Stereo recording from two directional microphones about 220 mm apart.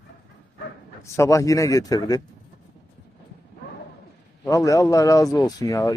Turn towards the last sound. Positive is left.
turn(degrees=15)  # may be behind; listen again after turning